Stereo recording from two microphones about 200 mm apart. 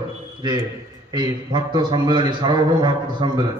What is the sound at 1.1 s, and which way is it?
A man's voice, 20° right (ahead or behind).